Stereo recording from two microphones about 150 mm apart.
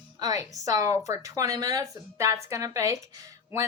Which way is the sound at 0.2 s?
25° right (ahead or behind).